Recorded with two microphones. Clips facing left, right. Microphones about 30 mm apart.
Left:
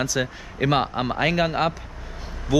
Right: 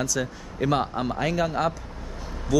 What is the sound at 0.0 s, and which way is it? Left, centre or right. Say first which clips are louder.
A man's voice: left 3 dB; left.